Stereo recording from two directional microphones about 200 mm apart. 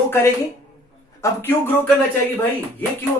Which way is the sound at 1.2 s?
10° left (ahead or behind).